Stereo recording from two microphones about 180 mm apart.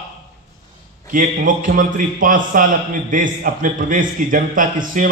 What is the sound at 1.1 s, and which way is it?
A man's voice, 50° right (ahead or behind).